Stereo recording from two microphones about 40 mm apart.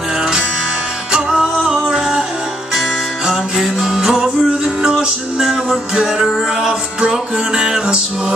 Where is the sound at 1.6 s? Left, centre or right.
Centre.